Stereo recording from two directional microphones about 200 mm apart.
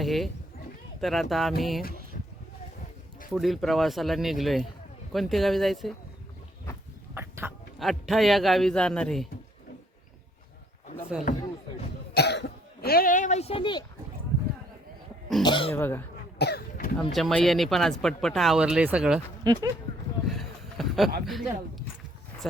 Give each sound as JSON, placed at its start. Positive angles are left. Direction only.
{"t": 0.0, "sound": "speech", "side_deg": 0}
{"t": 2.1, "sound": "a sound", "side_deg": 45}
{"t": 3.3, "sound": "speech", "side_deg": 0}
{"t": 7.1, "sound": "a sound", "side_deg": -10}
{"t": 7.8, "sound": "speech", "side_deg": 0}
{"t": 11.3, "sound": "speech", "side_deg": 40}
{"t": 12.1, "sound": "cough", "side_deg": 55}
{"t": 15.4, "sound": "speech", "side_deg": 25}
{"t": 15.7, "sound": "speech", "side_deg": 10}
{"t": 16.4, "sound": "throat clearing", "side_deg": 50}
{"t": 17.0, "sound": "speech", "side_deg": 0}
{"t": 19.5, "sound": "speech", "side_deg": -20}
{"t": 20.2, "sound": "a sound", "side_deg": 0}
{"t": 21.2, "sound": "speech", "side_deg": 0}